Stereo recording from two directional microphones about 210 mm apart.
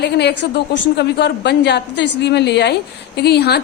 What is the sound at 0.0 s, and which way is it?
A woman's voice, 50° left (ahead or behind).